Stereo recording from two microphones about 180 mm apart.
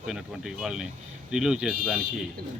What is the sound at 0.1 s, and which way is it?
A man's voice, 5° right (ahead or behind).